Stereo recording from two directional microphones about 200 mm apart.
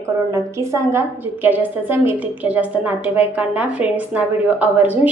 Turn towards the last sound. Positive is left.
turn(degrees=-10)  # may be behind; listen again after turning